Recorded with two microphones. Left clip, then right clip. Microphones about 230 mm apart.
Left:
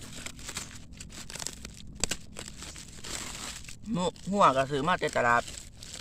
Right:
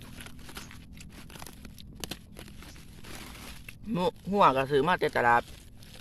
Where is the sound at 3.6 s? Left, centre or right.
Centre.